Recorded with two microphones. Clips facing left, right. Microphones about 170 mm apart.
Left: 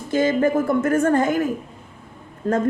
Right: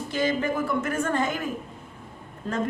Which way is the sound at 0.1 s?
50° left (ahead or behind).